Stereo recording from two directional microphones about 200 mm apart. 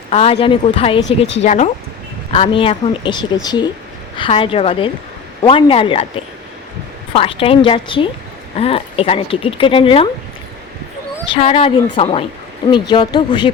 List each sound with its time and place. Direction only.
0.1 s speech: 30° left (ahead or behind)
11.3 s speech: 30° left (ahead or behind)